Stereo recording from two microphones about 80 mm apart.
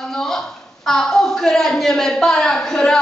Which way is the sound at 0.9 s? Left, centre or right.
Centre.